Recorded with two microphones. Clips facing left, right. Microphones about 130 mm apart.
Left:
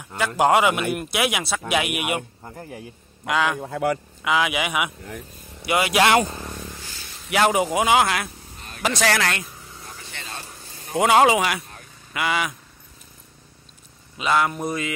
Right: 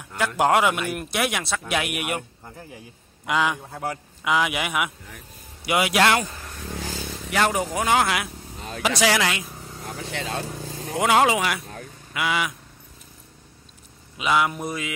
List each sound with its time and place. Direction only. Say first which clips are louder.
0.4 s speech: left 2 dB; 5° left (ahead or behind)
3.3 s speech: left 1 dB; centre (ahead or behind)
3.6 s a man's voice: left 7 dB; 80° left
4.2 s a man's voice: right 1 dB; centre (ahead or behind)
6.1 s speech: left 5 dB; 25° left (ahead or behind)
7.2 s speech: left 4 dB; 10° left (ahead or behind)
8.8 s a man's voice: even; 10° right (ahead or behind)
9.8 s vehicle: right 9 dB; 90° right
11.0 s speech: left 3 dB; centre (ahead or behind)
14.1 s a man's voice: left 1 dB; 5° right (ahead or behind)